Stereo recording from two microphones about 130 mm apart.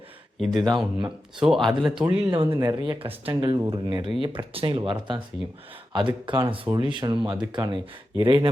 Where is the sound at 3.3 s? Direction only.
35° right (ahead or behind).